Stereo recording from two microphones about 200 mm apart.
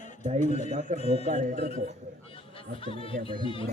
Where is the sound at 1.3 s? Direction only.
35° right (ahead or behind).